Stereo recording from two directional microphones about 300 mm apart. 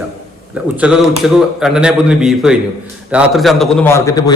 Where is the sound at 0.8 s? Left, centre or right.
Centre.